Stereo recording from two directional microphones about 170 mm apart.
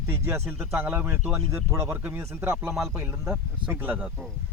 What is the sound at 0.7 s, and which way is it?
Speech, 10° right (ahead or behind).